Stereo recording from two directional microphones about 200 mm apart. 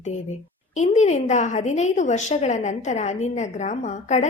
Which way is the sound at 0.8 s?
35° left (ahead or behind).